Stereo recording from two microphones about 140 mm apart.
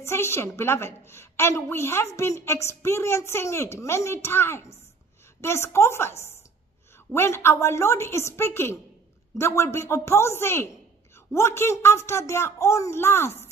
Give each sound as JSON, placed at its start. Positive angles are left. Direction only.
{"t": 0.0, "sound": "a woman's voice", "side_deg": 20}